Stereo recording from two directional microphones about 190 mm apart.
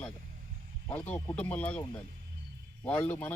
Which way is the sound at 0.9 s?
10° left (ahead or behind).